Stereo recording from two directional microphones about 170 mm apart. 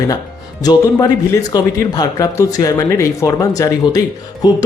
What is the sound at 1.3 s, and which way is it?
Speech, 20° left (ahead or behind).